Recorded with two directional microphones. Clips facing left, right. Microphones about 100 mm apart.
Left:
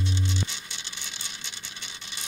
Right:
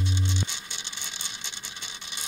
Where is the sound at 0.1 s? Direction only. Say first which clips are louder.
Even; 20° right (ahead or behind).